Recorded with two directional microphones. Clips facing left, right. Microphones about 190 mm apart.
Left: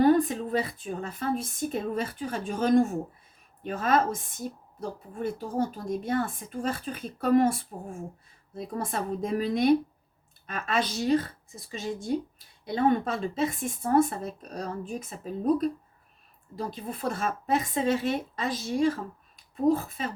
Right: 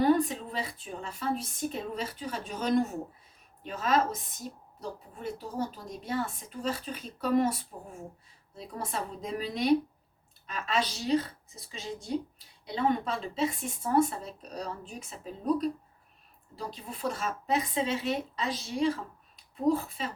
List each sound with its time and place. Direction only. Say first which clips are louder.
0.2 s a woman's voice: left 5 dB; 45° left (ahead or behind)
16.6 s a woman's voice: left 5 dB; 50° left (ahead or behind)